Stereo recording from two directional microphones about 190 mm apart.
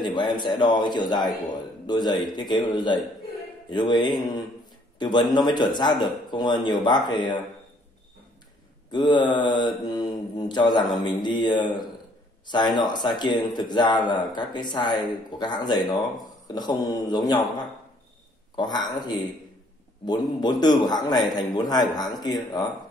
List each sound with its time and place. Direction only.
0.0 s a man's voice: 25° left (ahead or behind)
8.9 s a man's voice: 25° left (ahead or behind)